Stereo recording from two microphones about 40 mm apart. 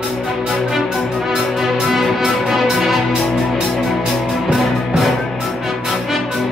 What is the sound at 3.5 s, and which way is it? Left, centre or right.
Music, right.